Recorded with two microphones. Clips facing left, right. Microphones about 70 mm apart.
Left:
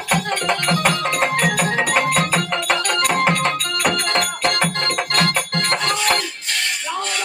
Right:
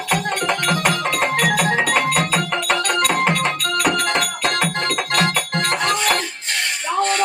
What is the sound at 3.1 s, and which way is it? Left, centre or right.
Music, centre.